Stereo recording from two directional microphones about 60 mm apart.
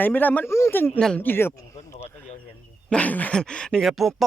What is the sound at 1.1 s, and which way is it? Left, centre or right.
Speech, left.